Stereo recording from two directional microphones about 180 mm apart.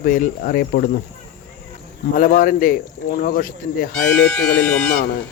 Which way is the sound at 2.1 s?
50° left (ahead or behind).